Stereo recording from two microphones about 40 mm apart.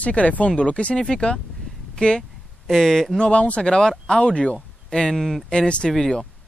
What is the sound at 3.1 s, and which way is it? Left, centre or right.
Speech, left.